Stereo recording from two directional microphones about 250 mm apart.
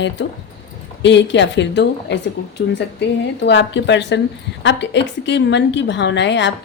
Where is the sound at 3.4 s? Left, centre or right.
Left.